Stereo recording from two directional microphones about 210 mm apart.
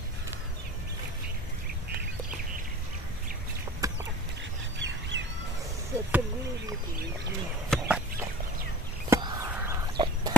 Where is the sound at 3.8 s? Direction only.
15° right (ahead or behind).